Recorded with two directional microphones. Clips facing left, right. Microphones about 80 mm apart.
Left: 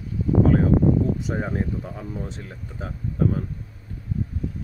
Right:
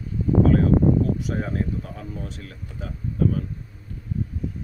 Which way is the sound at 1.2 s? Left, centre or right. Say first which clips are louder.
Even; left.